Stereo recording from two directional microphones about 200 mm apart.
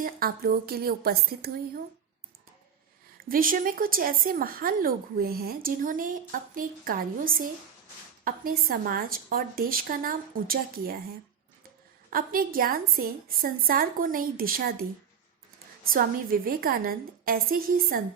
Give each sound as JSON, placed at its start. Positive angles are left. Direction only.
{"t": 0.0, "sound": "speech", "side_deg": -45}
{"t": 3.2, "sound": "speech", "side_deg": -45}
{"t": 12.1, "sound": "speech", "side_deg": -45}